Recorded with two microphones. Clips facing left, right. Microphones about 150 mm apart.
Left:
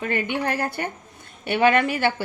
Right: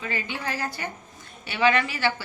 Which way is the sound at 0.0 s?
60° left (ahead or behind).